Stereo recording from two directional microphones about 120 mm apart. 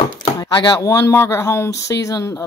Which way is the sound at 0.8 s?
25° left (ahead or behind).